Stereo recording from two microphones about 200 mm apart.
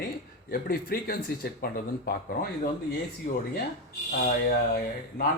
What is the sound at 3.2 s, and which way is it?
Speech, 40° left (ahead or behind).